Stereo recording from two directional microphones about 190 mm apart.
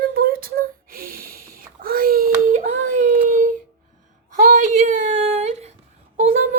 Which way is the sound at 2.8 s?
45° right (ahead or behind).